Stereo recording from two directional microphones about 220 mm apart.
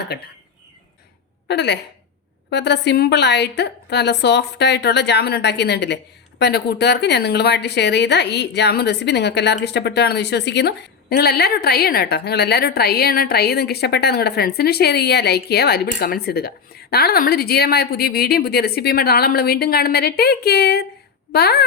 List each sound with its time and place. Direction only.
1.5 s a woman's voice: 50° left (ahead or behind)